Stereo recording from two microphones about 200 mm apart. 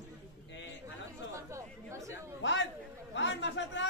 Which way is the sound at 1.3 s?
15° right (ahead or behind).